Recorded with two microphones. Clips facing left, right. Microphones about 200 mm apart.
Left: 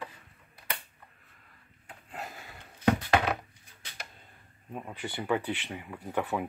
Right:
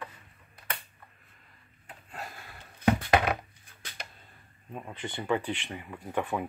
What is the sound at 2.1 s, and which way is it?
Sniff, 15° left (ahead or behind).